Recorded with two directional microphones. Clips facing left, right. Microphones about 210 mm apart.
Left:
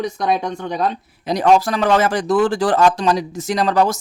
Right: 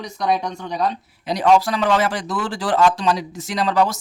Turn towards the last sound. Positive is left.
turn(degrees=45)  # may be behind; listen again after turning